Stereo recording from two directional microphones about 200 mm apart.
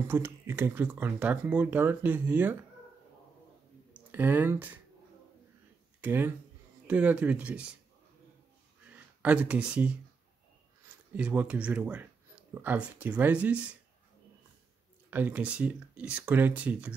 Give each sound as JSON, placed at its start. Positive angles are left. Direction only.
{"t": 0.1, "sound": "speech", "side_deg": -10}
{"t": 3.9, "sound": "speech", "side_deg": -10}
{"t": 5.9, "sound": "speech", "side_deg": -10}
{"t": 8.9, "sound": "speech", "side_deg": -5}
{"t": 11.1, "sound": "speech", "side_deg": -5}
{"t": 15.0, "sound": "speech", "side_deg": -10}